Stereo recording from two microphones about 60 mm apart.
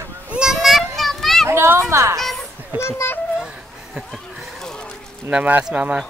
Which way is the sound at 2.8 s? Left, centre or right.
Left.